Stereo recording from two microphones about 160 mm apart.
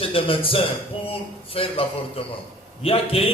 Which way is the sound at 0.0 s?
35° left (ahead or behind).